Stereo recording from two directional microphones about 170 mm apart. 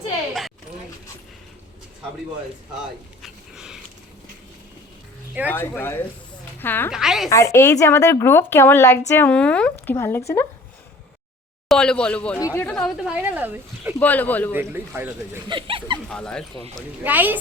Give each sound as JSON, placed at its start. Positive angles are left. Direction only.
{"t": 3.2, "sound": "a sound", "side_deg": 0}
{"t": 5.5, "sound": "speech", "side_deg": 10}
{"t": 6.9, "sound": "speech", "side_deg": -5}
{"t": 7.3, "sound": "speech", "side_deg": 15}
{"t": 11.7, "sound": "speech", "side_deg": 5}
{"t": 14.0, "sound": "speech", "side_deg": 10}
{"t": 14.5, "sound": "a man's voice", "side_deg": -15}
{"t": 15.4, "sound": "a sound", "side_deg": -30}
{"t": 16.0, "sound": "speech", "side_deg": 5}
{"t": 17.0, "sound": "a man's voice", "side_deg": -10}